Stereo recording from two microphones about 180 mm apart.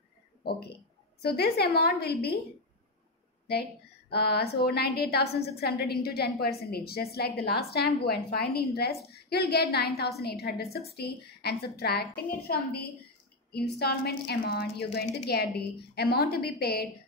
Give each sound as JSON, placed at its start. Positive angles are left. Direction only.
{"t": 1.2, "sound": "a woman's voice", "side_deg": 60}
{"t": 4.1, "sound": "a woman's voice", "side_deg": 60}